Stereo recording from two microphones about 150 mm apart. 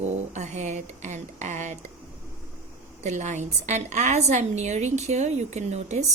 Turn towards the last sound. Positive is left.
turn(degrees=-50)  # may be behind; listen again after turning